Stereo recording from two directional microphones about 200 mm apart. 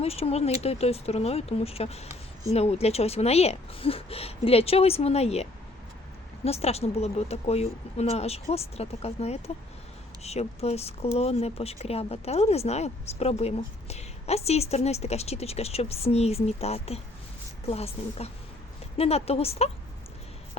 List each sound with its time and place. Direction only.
0.0 s speech: 30° left (ahead or behind)